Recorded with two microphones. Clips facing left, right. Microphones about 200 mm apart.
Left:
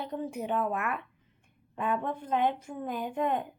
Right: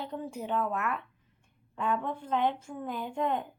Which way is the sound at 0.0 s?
15° left (ahead or behind).